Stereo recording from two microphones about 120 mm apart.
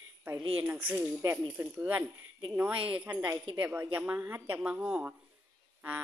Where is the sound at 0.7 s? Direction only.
15° right (ahead or behind).